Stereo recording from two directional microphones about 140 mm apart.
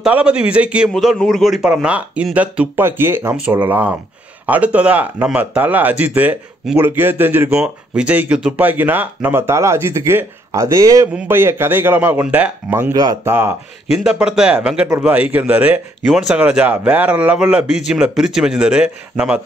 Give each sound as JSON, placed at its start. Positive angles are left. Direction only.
{"t": 0.0, "sound": "speech", "side_deg": -5}
{"t": 0.9, "sound": "speech", "side_deg": 5}
{"t": 12.9, "sound": "speech", "side_deg": -25}
{"t": 13.9, "sound": "speech", "side_deg": -5}